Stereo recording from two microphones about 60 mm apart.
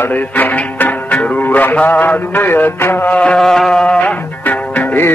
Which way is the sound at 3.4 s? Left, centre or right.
Centre.